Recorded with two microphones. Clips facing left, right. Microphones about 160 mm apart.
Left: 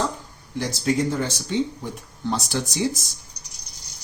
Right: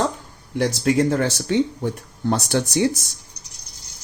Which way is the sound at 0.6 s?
70° right (ahead or behind).